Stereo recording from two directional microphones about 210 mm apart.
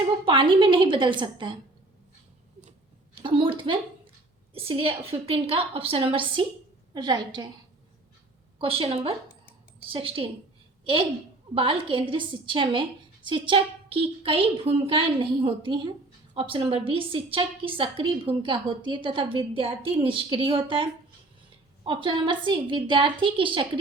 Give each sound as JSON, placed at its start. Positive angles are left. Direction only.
{"t": 0.3, "sound": "a woman's voice", "side_deg": -25}
{"t": 3.2, "sound": "a woman's voice", "side_deg": -25}
{"t": 8.5, "sound": "a woman's voice", "side_deg": -25}
{"t": 11.5, "sound": "a woman's voice", "side_deg": -25}
{"t": 21.8, "sound": "a woman's voice", "side_deg": -25}